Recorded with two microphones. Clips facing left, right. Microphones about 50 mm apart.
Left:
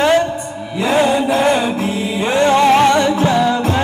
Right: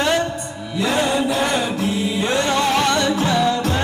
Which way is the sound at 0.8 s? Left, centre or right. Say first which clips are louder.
Left 5 dB; left.